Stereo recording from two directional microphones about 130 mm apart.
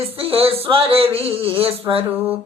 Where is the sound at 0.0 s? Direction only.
45° right (ahead or behind).